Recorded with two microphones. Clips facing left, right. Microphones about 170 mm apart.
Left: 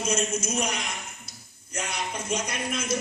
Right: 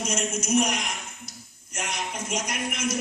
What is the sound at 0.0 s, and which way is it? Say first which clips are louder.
Speech: left 2 dB; 30° left (ahead or behind).